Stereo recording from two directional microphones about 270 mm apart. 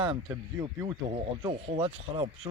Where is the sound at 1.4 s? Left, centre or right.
Centre.